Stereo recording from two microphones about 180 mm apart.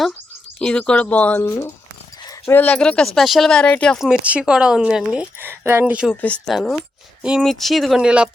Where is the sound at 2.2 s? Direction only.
20° left (ahead or behind).